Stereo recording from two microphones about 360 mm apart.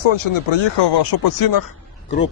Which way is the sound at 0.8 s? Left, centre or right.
Left.